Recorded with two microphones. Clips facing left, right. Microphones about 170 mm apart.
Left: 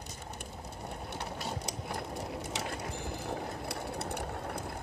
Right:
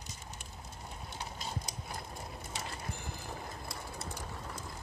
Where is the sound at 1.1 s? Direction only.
65° left (ahead or behind).